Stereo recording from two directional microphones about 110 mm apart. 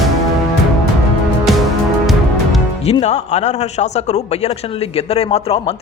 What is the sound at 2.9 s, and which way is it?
A man's voice, 80° left.